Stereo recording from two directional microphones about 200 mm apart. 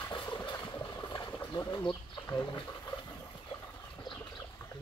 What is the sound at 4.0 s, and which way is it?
Rodents, 20° left (ahead or behind).